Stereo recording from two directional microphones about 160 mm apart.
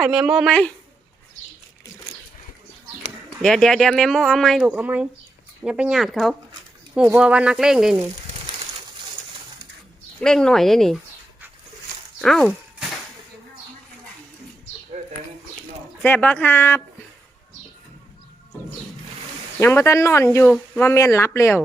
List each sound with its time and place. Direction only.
0.0 s speech: 5° right (ahead or behind)
3.4 s speech: 5° left (ahead or behind)
10.2 s speech: 5° left (ahead or behind)
12.2 s speech: 5° left (ahead or behind)
15.0 s bird: 55° right (ahead or behind)
16.0 s speech: 10° left (ahead or behind)
19.5 s speech: 15° left (ahead or behind)